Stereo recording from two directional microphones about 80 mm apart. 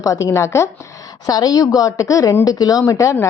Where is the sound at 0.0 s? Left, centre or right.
Left.